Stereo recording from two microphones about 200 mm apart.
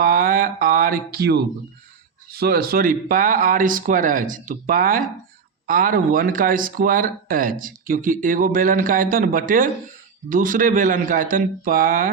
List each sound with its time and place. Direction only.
0.0 s mantra: 45° right (ahead or behind)
2.3 s speech: 50° right (ahead or behind)